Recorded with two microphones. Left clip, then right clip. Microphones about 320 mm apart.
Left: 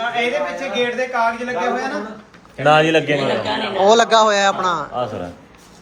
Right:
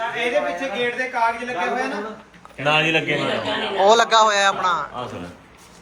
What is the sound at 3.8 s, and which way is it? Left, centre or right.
A man's voice, centre.